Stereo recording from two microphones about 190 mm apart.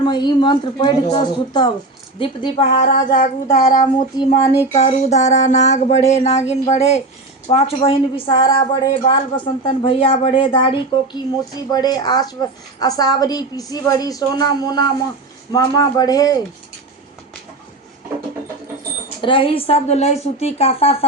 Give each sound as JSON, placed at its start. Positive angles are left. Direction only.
{"t": 0.0, "sound": "a woman's voice", "side_deg": 25}
{"t": 4.7, "sound": "a woman's voice", "side_deg": 35}
{"t": 19.2, "sound": "a woman's voice", "side_deg": 25}